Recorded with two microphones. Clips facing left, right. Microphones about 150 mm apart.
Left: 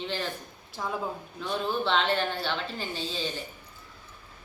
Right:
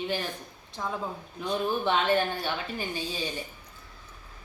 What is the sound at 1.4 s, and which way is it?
Speech, 15° right (ahead or behind).